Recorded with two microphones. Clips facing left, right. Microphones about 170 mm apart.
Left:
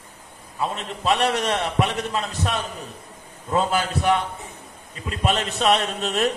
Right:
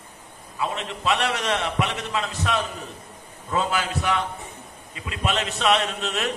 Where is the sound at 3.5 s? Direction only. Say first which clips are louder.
Left 3 dB; 45° left (ahead or behind).